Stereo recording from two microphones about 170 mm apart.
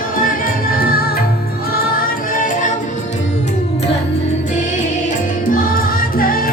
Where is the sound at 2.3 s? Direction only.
50° left (ahead or behind).